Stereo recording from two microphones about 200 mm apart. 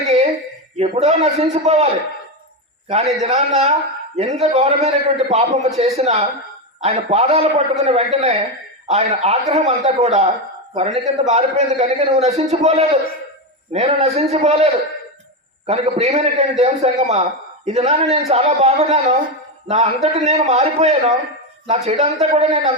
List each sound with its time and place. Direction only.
0.8 s a man's voice: 30° right (ahead or behind)
2.9 s a man's voice: 30° right (ahead or behind)